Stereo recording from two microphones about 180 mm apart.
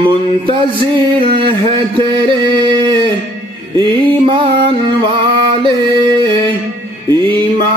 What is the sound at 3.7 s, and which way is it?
Music, 25° right (ahead or behind).